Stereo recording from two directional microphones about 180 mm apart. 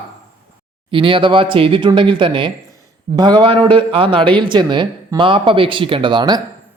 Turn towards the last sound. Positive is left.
turn(degrees=-25)  # may be behind; listen again after turning